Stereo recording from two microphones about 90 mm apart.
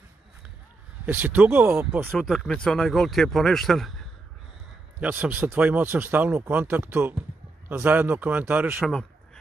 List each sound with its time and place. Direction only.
1.0 s speech: 20° right (ahead or behind)
2.1 s speech: 5° left (ahead or behind)
5.0 s speech: 20° right (ahead or behind)
8.8 s a sound: 5° left (ahead or behind)